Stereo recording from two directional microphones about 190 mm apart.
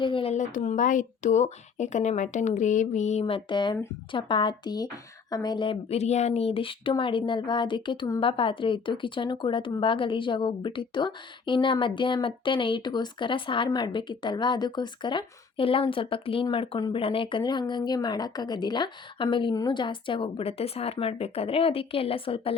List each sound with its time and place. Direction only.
0.0 s speech: 30° left (ahead or behind)